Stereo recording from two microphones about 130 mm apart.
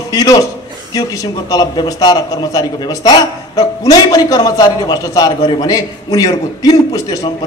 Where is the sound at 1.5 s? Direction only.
30° left (ahead or behind).